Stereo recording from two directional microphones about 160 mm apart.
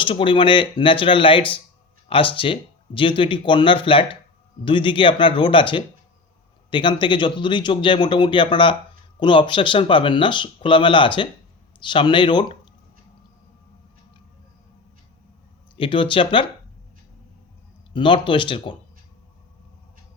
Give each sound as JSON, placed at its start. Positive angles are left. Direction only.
{"t": 0.0, "sound": "speech", "side_deg": 30}
{"t": 15.7, "sound": "speech", "side_deg": 30}
{"t": 17.9, "sound": "speech", "side_deg": 30}